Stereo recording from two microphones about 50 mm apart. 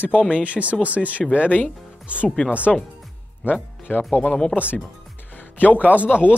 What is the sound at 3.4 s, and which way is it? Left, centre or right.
Speech, left.